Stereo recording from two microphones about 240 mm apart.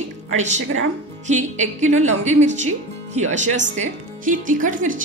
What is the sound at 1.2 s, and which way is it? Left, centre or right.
A woman's voice, right.